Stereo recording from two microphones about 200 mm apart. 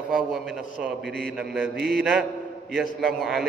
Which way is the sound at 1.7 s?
55° right (ahead or behind).